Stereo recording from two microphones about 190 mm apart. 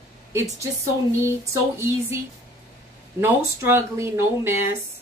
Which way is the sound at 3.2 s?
15° right (ahead or behind).